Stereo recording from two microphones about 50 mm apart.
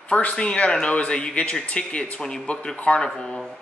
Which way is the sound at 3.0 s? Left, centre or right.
Centre.